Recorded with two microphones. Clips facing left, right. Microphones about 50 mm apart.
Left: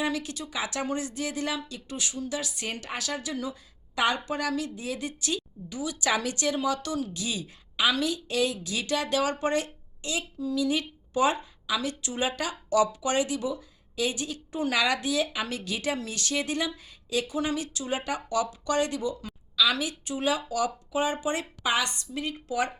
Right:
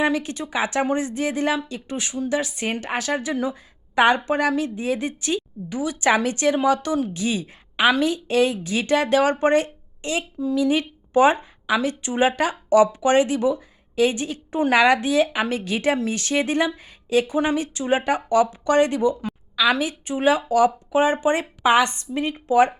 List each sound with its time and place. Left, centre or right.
0.0 s a woman's voice: right